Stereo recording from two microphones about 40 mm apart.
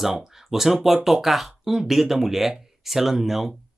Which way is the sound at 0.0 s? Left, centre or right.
Centre.